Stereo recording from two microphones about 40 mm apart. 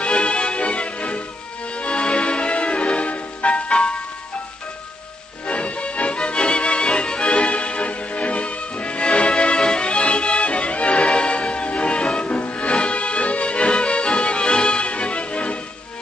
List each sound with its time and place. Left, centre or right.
0.0 s music: left
5.5 s music: left